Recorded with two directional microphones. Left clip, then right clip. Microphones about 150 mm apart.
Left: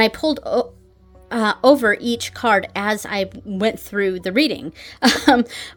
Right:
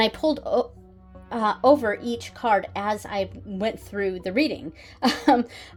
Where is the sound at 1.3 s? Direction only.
50° left (ahead or behind).